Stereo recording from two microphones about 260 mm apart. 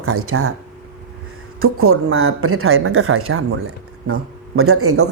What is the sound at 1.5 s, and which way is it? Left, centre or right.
Speech, right.